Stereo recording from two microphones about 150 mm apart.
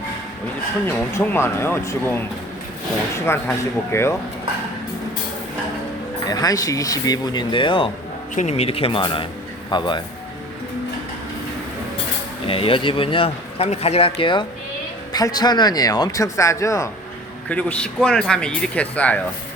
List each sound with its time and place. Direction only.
0.9 s speech: 15° left (ahead or behind)
6.2 s speech: 25° left (ahead or behind)
8.4 s speech: 45° left (ahead or behind); by 10.0 s 30° left (ahead or behind)
12.5 s speech: 35° left (ahead or behind); by 16.9 s 20° left (ahead or behind)
17.5 s speech: 10° left (ahead or behind)